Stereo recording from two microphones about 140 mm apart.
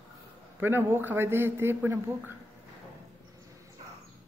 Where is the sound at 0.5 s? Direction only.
15° right (ahead or behind).